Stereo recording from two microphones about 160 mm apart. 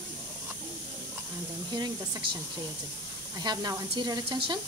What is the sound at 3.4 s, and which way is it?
Speech, 25° right (ahead or behind).